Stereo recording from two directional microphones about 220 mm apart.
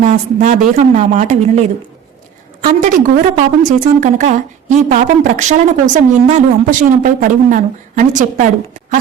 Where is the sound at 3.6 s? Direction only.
35° right (ahead or behind).